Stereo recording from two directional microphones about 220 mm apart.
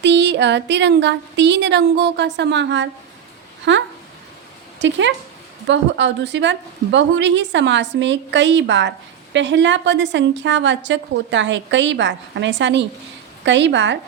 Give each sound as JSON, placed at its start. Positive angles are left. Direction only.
{"t": 0.0, "sound": "a woman's voice", "side_deg": -50}